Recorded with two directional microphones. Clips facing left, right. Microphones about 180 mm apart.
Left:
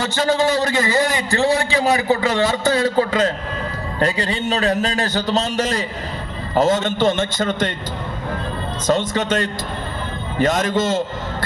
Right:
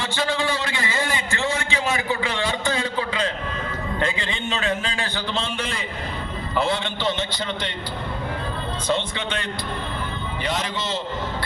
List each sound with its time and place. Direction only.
0.0 s a man's voice: 40° left (ahead or behind)
8.9 s a man's voice: 40° left (ahead or behind)